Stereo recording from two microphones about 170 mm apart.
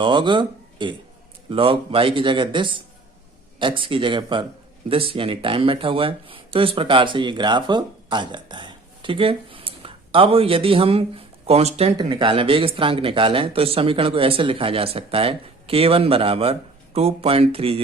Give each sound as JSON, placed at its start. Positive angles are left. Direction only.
{"t": 0.0, "sound": "speech", "side_deg": -25}
{"t": 11.9, "sound": "speech", "side_deg": -25}